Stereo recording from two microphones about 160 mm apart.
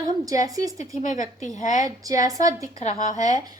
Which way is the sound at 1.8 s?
20° right (ahead or behind).